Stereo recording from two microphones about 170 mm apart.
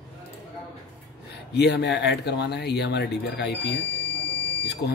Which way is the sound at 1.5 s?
80° left.